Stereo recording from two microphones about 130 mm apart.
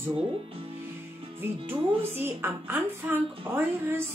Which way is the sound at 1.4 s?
15° right (ahead or behind).